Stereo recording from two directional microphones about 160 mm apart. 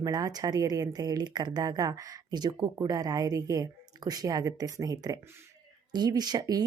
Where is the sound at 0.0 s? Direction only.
25° right (ahead or behind).